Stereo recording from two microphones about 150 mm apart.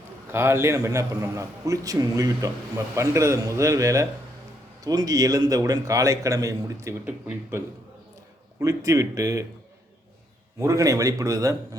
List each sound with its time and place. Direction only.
0.3 s a man's voice: 15° right (ahead or behind)
10.6 s a man's voice: 20° right (ahead or behind)